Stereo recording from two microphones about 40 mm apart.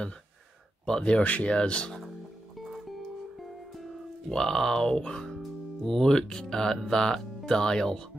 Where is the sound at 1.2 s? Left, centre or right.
Left.